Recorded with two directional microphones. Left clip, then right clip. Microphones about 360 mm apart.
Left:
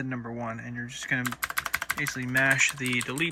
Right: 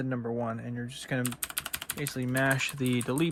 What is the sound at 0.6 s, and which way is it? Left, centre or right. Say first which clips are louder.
Speech: left 2 dB; right.